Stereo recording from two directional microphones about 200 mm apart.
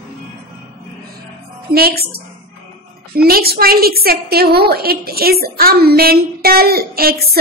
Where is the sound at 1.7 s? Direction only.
50° right (ahead or behind).